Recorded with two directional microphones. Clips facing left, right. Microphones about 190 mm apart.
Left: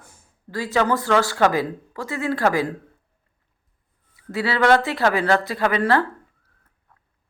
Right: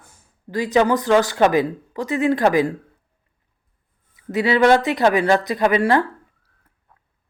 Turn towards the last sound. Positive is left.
turn(degrees=-15)  # may be behind; listen again after turning